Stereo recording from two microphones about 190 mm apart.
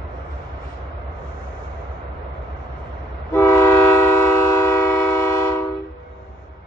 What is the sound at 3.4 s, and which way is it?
Train, 15° left (ahead or behind).